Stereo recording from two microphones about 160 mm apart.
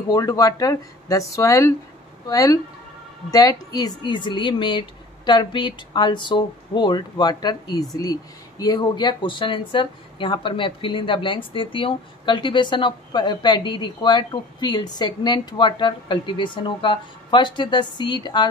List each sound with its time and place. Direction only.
0.1 s a woman's voice: 20° left (ahead or behind)